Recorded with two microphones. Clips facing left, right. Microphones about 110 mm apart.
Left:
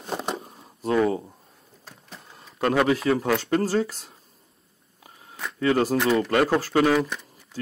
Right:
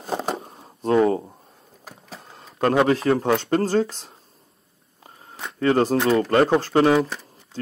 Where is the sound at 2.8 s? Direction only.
35° right (ahead or behind).